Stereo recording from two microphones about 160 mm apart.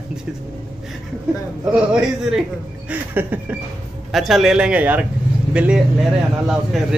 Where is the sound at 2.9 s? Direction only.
10° right (ahead or behind).